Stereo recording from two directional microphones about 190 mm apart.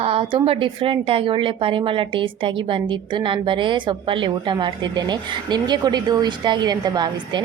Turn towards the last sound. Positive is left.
turn(degrees=-20)  # may be behind; listen again after turning